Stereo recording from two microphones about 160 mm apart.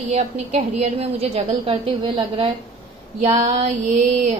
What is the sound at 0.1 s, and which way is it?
A woman's voice, 45° right (ahead or behind).